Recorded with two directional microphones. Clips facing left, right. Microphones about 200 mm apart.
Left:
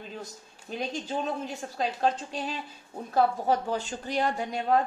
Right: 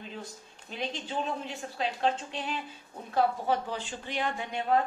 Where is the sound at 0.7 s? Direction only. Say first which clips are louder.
Left 2 dB; 40° left (ahead or behind).